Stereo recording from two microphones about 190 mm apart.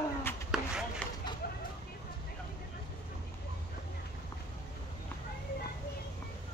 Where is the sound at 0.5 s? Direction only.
5° right (ahead or behind).